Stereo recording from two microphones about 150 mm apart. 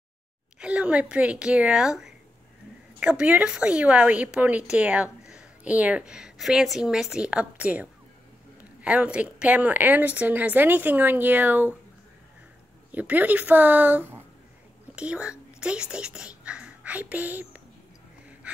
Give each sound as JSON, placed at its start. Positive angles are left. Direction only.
{"t": 0.6, "sound": "a woman's voice", "side_deg": -10}
{"t": 12.9, "sound": "a woman's voice", "side_deg": -10}